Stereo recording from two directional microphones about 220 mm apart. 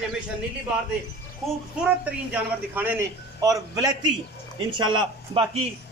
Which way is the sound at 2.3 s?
10° right (ahead or behind).